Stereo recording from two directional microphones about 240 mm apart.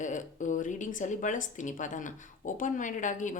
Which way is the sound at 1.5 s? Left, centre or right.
Left.